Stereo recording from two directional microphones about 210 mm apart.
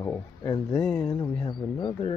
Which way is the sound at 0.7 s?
5° left (ahead or behind).